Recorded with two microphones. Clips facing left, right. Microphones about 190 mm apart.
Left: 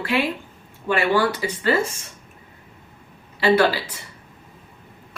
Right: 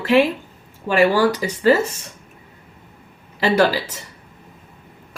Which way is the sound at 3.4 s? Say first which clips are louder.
Right 1 dB; 45° right (ahead or behind).